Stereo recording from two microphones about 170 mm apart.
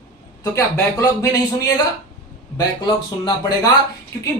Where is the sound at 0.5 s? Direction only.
20° left (ahead or behind).